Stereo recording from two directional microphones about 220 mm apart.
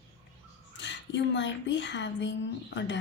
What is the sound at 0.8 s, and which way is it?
A woman's voice, 55° left (ahead or behind).